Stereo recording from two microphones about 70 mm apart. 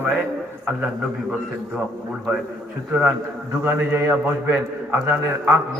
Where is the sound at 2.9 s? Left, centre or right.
Centre.